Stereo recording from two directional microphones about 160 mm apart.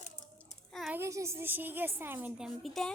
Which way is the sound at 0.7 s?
Centre (ahead or behind).